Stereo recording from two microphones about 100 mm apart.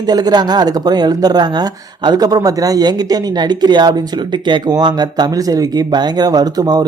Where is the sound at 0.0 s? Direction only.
40° right (ahead or behind).